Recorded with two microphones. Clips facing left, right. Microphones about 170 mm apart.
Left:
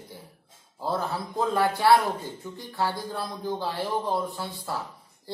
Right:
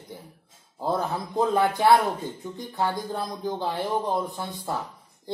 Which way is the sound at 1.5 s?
20° right (ahead or behind).